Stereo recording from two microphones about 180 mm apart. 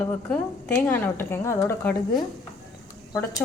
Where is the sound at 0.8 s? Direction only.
10° left (ahead or behind).